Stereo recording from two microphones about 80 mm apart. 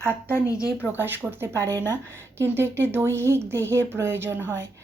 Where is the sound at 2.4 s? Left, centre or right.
Right.